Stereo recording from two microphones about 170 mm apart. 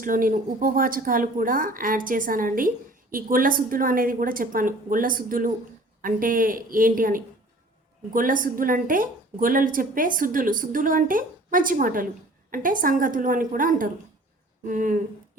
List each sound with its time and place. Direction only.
0.0 s a woman's voice: 55° right (ahead or behind)